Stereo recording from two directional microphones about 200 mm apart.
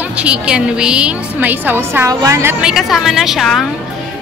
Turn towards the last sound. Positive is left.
turn(degrees=0)  # may be behind; listen again after turning